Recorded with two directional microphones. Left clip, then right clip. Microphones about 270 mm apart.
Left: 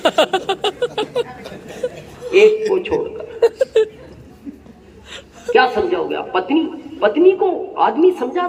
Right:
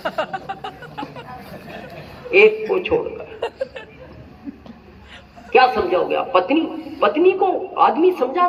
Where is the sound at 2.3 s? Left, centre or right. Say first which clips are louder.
Left 2 dB; centre.